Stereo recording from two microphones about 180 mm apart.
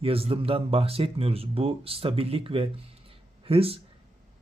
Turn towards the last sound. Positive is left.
turn(degrees=-30)  # may be behind; listen again after turning